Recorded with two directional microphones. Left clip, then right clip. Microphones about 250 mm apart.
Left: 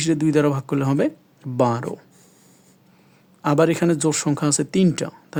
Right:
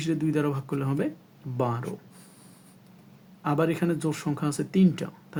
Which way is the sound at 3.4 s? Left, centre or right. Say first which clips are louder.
Left 8 dB; left.